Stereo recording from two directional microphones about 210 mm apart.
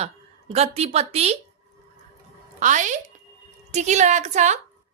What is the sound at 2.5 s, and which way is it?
A woman's voice, 35° right (ahead or behind).